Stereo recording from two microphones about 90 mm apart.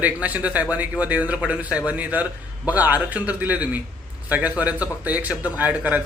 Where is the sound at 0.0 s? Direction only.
15° right (ahead or behind).